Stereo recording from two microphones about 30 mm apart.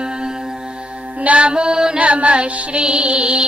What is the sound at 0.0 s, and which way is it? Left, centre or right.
Music, right.